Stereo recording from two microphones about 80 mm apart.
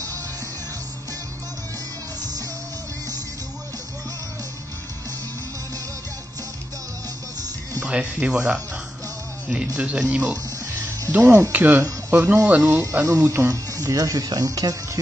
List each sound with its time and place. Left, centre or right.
7.8 s speech: centre
9.8 s speech: centre; by 13.6 s right
13.8 s speech: right